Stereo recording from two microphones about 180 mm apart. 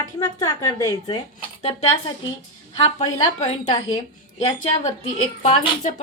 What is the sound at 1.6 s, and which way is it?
Speech, 35° left (ahead or behind).